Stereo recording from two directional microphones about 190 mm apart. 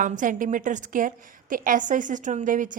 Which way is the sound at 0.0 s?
45° right (ahead or behind).